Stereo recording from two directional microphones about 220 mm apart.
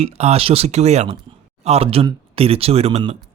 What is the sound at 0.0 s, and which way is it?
Speech, 30° right (ahead or behind).